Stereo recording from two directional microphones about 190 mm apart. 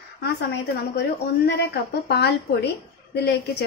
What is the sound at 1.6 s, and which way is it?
A woman's voice, 60° left (ahead or behind).